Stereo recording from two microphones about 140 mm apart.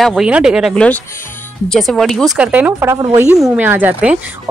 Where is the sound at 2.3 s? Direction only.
10° right (ahead or behind).